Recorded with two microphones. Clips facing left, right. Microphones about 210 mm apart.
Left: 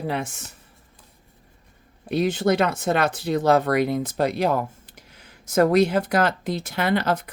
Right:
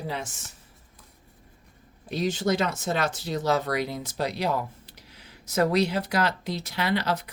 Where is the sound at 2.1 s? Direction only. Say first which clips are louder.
Left 5 dB; 60° left (ahead or behind).